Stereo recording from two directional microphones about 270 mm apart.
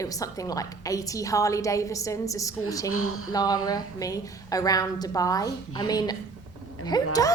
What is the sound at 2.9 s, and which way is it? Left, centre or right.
Speech, left.